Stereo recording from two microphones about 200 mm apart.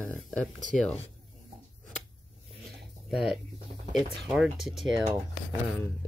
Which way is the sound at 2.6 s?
Centre (ahead or behind).